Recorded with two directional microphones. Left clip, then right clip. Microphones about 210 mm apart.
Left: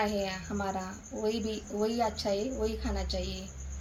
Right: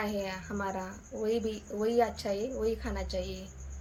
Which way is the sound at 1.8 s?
5° right (ahead or behind).